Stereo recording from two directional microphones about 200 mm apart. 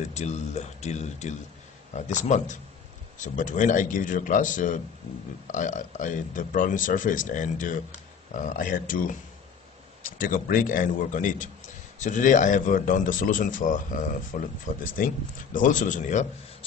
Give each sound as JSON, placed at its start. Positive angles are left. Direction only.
{"t": 0.0, "sound": "speech", "side_deg": 35}